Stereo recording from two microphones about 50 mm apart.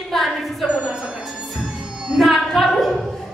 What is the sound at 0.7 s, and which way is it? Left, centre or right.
Speech, right.